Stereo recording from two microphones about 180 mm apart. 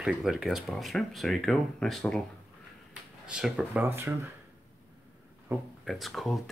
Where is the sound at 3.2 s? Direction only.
5° right (ahead or behind).